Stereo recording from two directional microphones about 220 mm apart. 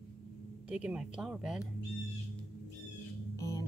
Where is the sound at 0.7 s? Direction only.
5° right (ahead or behind).